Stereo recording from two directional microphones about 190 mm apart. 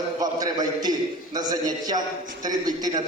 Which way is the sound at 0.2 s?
20° right (ahead or behind).